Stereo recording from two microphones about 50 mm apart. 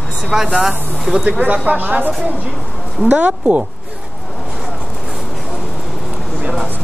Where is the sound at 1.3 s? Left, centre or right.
Right.